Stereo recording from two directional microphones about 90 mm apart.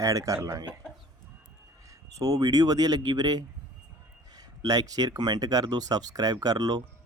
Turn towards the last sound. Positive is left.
turn(degrees=-50)  # may be behind; listen again after turning